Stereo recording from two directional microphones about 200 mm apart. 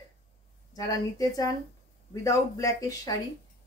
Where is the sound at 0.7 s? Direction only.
20° left (ahead or behind).